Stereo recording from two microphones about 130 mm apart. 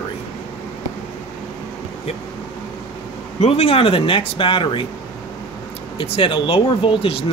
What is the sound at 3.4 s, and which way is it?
Speech, 50° left (ahead or behind).